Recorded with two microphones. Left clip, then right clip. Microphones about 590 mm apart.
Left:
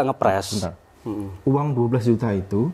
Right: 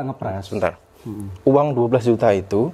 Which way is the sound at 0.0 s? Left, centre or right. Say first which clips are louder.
Left 8 dB; left.